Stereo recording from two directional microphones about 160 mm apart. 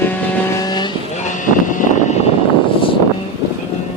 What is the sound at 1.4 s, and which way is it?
Vehicle, 55° left (ahead or behind).